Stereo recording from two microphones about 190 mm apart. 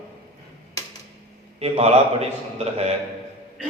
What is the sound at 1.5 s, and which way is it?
A man's voice, 30° right (ahead or behind).